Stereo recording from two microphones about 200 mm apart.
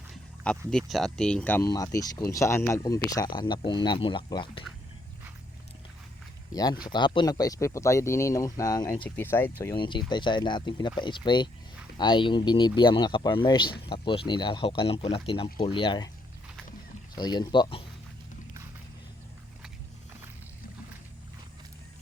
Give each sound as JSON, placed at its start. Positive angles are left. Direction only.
{"t": 0.1, "sound": "a sound", "side_deg": 5}
{"t": 0.7, "sound": "speech", "side_deg": 0}
{"t": 6.5, "sound": "speech", "side_deg": 20}
{"t": 9.7, "sound": "speech", "side_deg": 25}
{"t": 17.2, "sound": "speech", "side_deg": 20}